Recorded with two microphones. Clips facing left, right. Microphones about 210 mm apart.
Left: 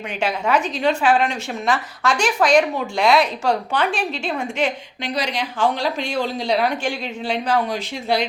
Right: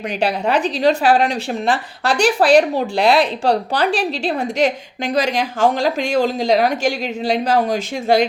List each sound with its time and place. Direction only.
0.2 s a woman's voice: 35° right (ahead or behind)